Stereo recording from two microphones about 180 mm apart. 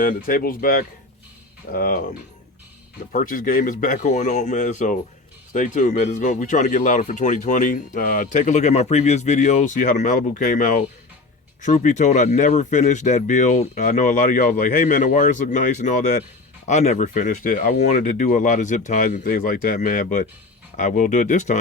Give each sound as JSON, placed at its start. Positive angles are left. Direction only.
{"t": 0.0, "sound": "speech", "side_deg": 50}
{"t": 3.1, "sound": "speech", "side_deg": 50}